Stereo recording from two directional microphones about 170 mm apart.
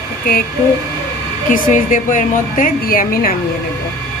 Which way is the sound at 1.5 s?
50° left (ahead or behind).